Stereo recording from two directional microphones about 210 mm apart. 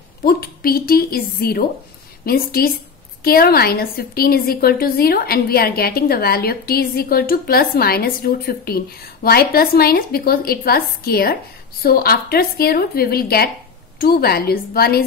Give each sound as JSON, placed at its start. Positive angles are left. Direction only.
{"t": 0.2, "sound": "a woman's voice", "side_deg": 45}